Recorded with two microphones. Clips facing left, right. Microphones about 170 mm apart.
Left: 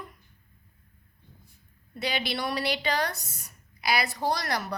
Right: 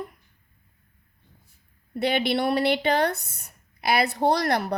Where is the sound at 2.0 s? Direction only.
55° right (ahead or behind).